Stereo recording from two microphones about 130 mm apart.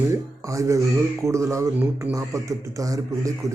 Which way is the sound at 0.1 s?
25° right (ahead or behind).